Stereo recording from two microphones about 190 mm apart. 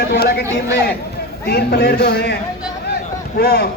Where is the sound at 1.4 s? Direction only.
55° left (ahead or behind).